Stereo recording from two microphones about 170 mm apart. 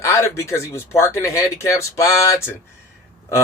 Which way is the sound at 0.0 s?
15° left (ahead or behind).